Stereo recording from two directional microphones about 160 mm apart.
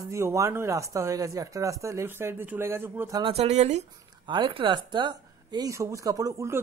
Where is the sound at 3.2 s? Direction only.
30° right (ahead or behind).